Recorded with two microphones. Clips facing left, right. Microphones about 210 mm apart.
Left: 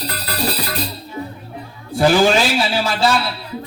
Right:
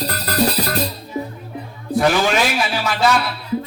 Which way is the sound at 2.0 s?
30° left (ahead or behind).